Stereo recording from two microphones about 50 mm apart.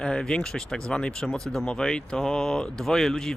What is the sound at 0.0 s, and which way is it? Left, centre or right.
Speech, centre.